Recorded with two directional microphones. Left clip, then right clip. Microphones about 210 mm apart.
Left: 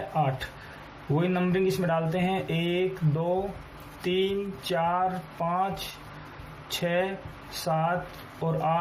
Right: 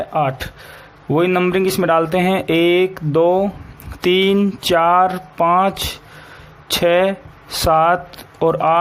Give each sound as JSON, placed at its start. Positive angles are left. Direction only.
{"t": 0.1, "sound": "speech", "side_deg": -50}